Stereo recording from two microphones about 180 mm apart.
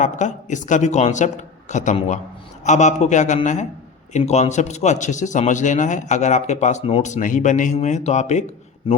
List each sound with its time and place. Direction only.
0.0 s a man's voice: 45° left (ahead or behind)